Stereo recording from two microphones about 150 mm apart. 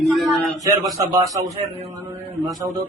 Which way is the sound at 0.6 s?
25° right (ahead or behind).